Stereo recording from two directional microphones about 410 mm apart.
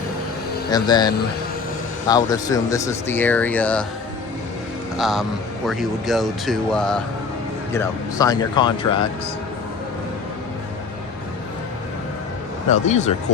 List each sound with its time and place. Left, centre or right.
0.7 s speech: centre
4.9 s speech: centre
12.7 s speech: centre